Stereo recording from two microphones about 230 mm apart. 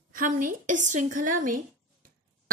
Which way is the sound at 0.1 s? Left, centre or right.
Right.